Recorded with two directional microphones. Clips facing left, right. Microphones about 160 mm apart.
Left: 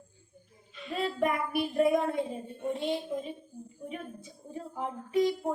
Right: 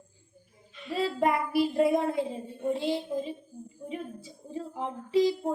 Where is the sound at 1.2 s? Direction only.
90° right.